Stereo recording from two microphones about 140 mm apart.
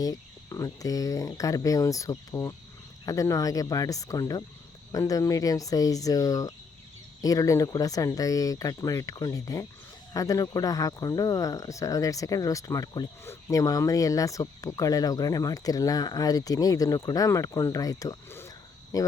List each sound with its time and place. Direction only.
0.0 s speech: 25° left (ahead or behind)